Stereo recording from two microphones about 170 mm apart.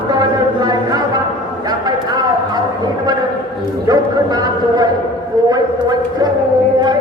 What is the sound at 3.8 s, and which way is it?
A man's voice, 25° right (ahead or behind).